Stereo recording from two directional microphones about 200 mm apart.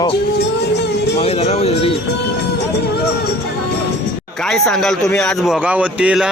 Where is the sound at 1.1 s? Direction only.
30° left (ahead or behind).